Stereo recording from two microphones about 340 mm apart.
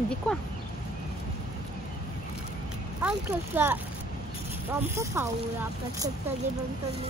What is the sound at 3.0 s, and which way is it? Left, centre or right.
Speech, centre.